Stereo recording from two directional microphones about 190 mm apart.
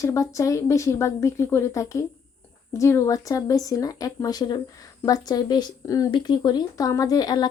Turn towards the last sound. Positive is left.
turn(degrees=20)  # may be behind; listen again after turning